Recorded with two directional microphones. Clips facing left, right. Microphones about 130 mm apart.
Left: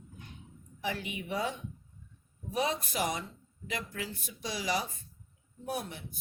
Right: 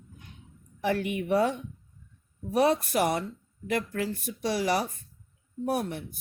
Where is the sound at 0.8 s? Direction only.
55° right (ahead or behind).